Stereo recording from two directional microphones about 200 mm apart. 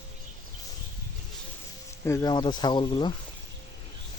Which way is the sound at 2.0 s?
15° left (ahead or behind).